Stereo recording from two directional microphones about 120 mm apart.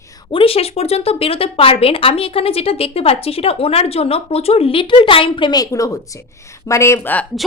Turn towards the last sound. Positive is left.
turn(degrees=15)  # may be behind; listen again after turning